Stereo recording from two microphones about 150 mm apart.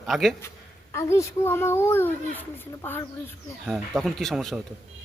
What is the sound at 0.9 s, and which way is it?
A child's voice, 20° left (ahead or behind).